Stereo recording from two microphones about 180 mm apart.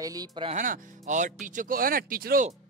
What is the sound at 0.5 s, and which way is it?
Speech, 45° right (ahead or behind).